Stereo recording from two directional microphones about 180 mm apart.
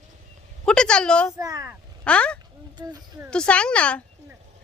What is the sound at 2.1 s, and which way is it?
Speech, 5° left (ahead or behind).